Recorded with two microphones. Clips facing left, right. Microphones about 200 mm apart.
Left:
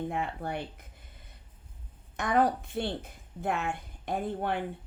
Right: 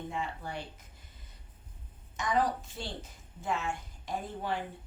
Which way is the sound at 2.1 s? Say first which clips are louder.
Left 4 dB; 60° left (ahead or behind).